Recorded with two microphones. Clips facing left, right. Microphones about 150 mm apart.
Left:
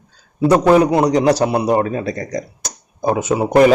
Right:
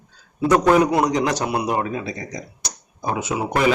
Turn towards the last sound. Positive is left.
turn(degrees=40)  # may be behind; listen again after turning